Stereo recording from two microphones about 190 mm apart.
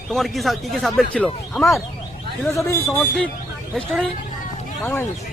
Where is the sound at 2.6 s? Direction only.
15° left (ahead or behind).